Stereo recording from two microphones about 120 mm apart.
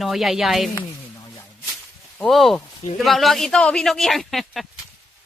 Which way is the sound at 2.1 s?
Centre (ahead or behind).